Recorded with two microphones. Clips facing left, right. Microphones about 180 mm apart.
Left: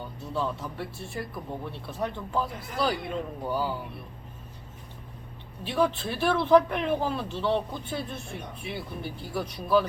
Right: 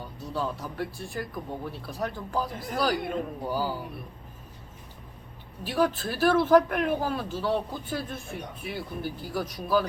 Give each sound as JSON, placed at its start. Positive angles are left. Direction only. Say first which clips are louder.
{"t": 0.2, "sound": "speech", "louder": "even", "side_deg": 0}
{"t": 2.5, "sound": "speech", "louder": "right 3 dB", "side_deg": -45}
{"t": 2.7, "sound": "speech", "louder": "right 1 dB", "side_deg": 0}
{"t": 5.6, "sound": "speech", "louder": "even", "side_deg": 0}